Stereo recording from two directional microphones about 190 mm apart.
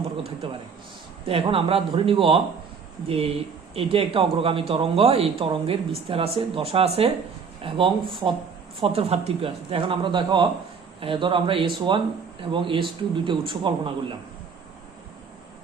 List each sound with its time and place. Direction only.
1.3 s speech: 30° right (ahead or behind)